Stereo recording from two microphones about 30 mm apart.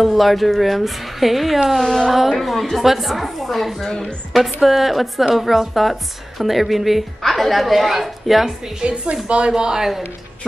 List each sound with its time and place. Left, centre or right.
0.0 s a woman's voice: centre
1.9 s a woman's voice: centre
8.8 s speech: right
9.6 s speech: right